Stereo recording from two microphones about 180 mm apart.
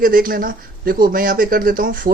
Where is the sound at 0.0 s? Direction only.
55° right (ahead or behind).